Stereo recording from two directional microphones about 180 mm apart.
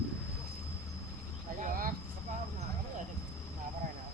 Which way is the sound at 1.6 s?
50° right (ahead or behind).